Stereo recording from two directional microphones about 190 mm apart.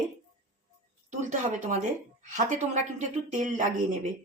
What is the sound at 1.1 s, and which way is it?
A woman's voice, 40° right (ahead or behind).